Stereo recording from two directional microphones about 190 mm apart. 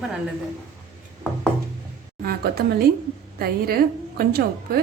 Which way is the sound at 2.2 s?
50° right (ahead or behind).